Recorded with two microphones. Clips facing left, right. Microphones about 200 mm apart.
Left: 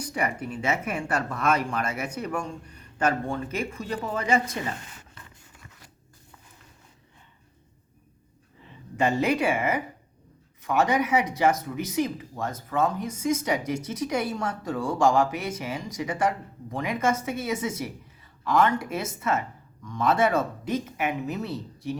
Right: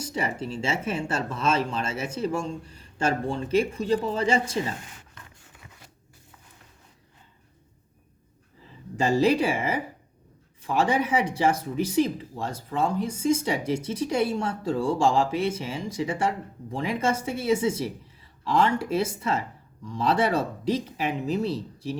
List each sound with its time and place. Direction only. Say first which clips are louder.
0.0 s speech: even; 25° right (ahead or behind)
8.6 s speech: even; 30° right (ahead or behind)